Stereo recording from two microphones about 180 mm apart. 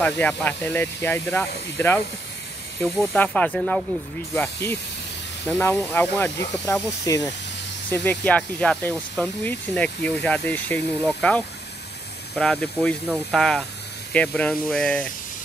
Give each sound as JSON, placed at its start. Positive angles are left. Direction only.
{"t": 0.0, "sound": "speech", "side_deg": 10}
{"t": 5.5, "sound": "speech", "side_deg": 15}